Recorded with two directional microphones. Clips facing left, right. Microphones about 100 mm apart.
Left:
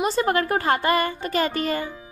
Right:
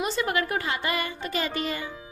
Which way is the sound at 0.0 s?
40° left (ahead or behind).